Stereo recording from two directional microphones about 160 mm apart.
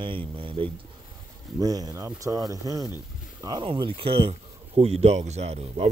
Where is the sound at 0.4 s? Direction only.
35° right (ahead or behind).